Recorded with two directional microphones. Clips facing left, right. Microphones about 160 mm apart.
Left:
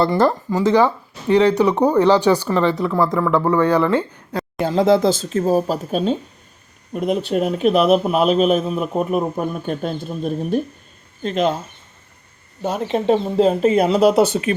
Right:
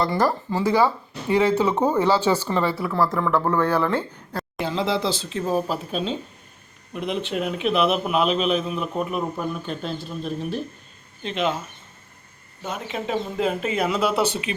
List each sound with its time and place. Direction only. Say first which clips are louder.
0.0 s speech: left 5 dB; 25° left (ahead or behind)
2.5 s speech: left 5 dB; 15° right (ahead or behind)
3.3 s speech: left 6 dB; 10° left (ahead or behind)
4.6 s a man's voice: left 9 dB; 45° left (ahead or behind)
12.6 s speech: left 10 dB; 35° left (ahead or behind)